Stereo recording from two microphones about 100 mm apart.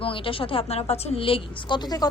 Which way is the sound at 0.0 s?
65° left (ahead or behind).